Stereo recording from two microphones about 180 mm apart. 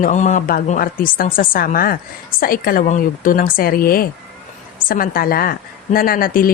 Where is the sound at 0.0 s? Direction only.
40° left (ahead or behind).